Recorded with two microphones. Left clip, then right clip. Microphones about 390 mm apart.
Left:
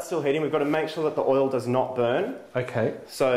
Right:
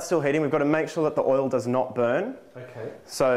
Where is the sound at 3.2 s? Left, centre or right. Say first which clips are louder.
Right 1 dB; right.